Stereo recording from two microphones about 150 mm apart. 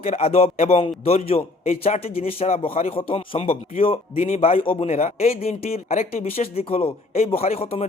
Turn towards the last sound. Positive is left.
turn(degrees=40)  # may be behind; listen again after turning